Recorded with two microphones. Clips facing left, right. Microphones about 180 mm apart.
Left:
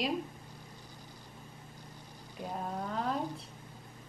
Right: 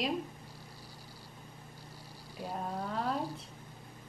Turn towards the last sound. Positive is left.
turn(degrees=0)  # may be behind; listen again after turning